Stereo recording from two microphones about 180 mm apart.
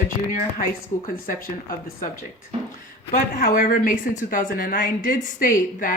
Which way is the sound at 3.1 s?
50° left (ahead or behind).